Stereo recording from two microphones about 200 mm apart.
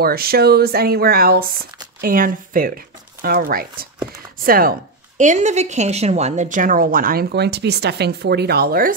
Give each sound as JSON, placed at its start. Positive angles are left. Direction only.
{"t": 0.0, "sound": "speech", "side_deg": -50}